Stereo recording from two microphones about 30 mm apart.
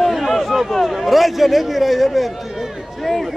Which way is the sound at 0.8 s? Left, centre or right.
Centre.